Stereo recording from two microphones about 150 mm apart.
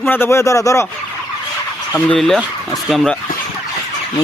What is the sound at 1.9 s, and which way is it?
Speech, 5° left (ahead or behind).